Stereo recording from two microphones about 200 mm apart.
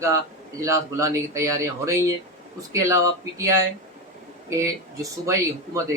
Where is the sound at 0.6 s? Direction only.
15° right (ahead or behind).